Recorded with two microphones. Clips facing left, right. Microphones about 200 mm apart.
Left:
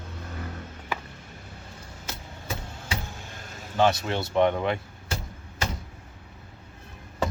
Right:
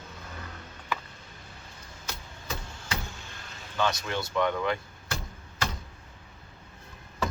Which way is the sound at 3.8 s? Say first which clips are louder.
Left 6 dB; 30° left (ahead or behind).